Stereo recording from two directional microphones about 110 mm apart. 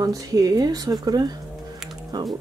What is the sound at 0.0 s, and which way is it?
Speech, 35° right (ahead or behind).